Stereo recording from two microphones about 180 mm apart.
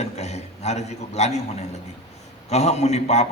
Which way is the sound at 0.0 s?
35° left (ahead or behind).